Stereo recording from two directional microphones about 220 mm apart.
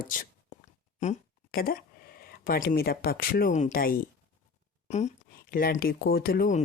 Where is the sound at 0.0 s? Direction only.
40° left (ahead or behind).